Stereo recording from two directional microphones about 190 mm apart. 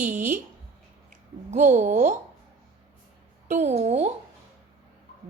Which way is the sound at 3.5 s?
35° right (ahead or behind).